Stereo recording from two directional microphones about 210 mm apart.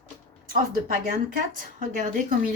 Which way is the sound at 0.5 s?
40° right (ahead or behind).